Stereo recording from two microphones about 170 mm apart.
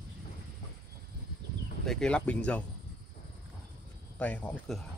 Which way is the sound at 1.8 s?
5° left (ahead or behind).